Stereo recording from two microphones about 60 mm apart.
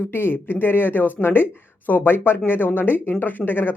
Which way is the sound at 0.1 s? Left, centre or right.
Left.